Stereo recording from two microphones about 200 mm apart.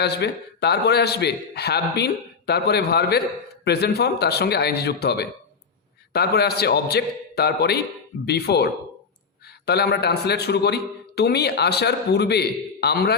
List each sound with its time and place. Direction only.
0.0 s a man's voice: 55° left (ahead or behind)